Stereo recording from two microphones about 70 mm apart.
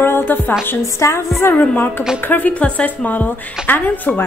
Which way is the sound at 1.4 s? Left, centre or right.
Left.